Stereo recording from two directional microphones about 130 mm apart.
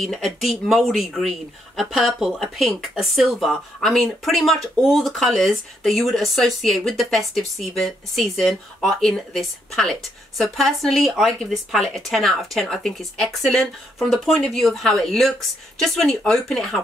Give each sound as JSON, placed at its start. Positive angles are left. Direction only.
{"t": 0.0, "sound": "speech", "side_deg": 0}